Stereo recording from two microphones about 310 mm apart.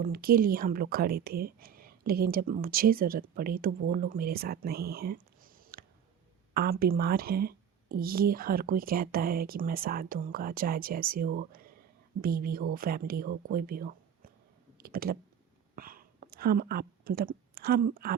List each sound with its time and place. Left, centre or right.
0.0 s speech: right